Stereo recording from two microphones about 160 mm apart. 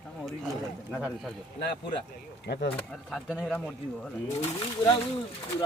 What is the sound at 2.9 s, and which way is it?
Speech, 5° left (ahead or behind).